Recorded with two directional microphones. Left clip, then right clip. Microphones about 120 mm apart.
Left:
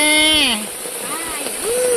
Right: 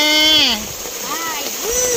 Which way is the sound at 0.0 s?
10° left (ahead or behind).